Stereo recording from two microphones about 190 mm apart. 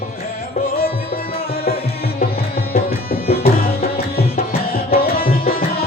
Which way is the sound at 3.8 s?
50° left (ahead or behind).